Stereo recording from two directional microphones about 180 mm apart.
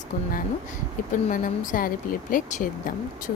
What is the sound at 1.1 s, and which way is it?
A woman's voice, 45° left (ahead or behind).